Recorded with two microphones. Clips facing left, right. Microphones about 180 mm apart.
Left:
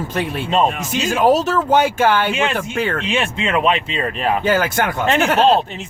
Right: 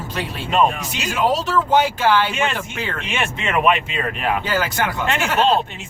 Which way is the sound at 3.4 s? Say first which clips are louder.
Right 1 dB; 30° left (ahead or behind).